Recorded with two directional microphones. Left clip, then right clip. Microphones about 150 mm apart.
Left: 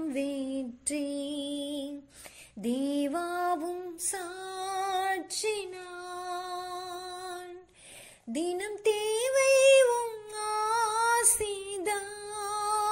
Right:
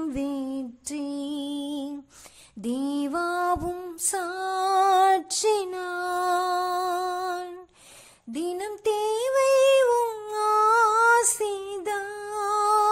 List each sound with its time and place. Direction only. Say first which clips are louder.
0.1 s music: right 2 dB; 15° right (ahead or behind)
4.1 s female singing: right 12 dB; 25° right (ahead or behind)
8.3 s female singing: right 2 dB; 15° right (ahead or behind)
10.0 s female singing: right 9 dB; 30° right (ahead or behind)